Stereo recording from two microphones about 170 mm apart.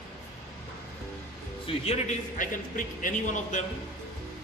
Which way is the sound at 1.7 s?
35° left (ahead or behind).